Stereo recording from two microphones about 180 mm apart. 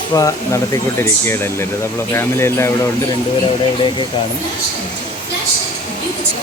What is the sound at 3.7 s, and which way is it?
Speech, 25° left (ahead or behind).